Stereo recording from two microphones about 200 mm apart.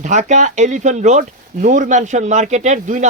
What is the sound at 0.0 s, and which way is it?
Speech, 40° right (ahead or behind).